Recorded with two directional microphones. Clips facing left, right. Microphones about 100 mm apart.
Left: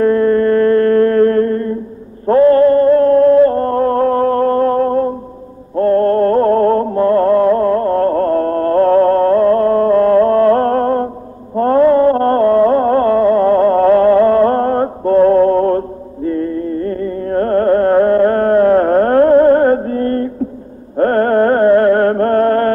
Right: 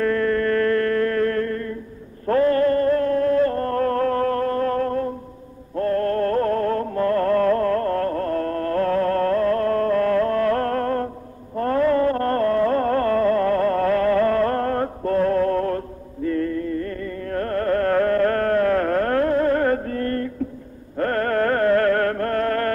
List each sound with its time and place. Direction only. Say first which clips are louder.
0.0 s music: left 9 dB; 30° left (ahead or behind)
2.2 s a sound: left 9 dB; 30° left (ahead or behind)
5.8 s music: left 9 dB; 35° left (ahead or behind)